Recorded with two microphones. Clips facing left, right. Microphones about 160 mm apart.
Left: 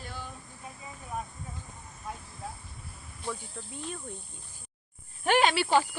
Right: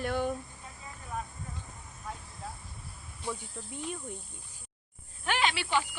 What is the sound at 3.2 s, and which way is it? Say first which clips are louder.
Speech: even; 15° right (ahead or behind).